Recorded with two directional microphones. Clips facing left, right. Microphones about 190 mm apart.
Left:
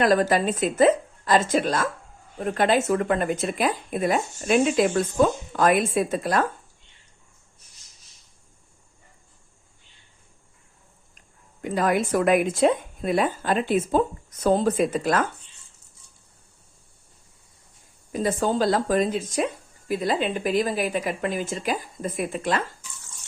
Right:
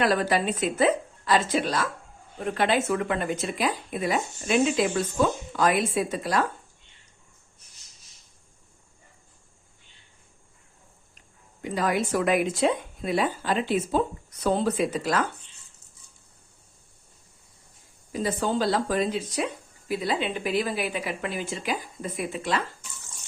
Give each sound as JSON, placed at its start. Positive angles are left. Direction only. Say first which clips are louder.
{"t": 0.0, "sound": "a woman's voice", "louder": "left 4 dB", "side_deg": 45}
{"t": 11.6, "sound": "a woman's voice", "louder": "left 3 dB", "side_deg": 50}
{"t": 18.1, "sound": "a woman's voice", "louder": "left 3 dB", "side_deg": 50}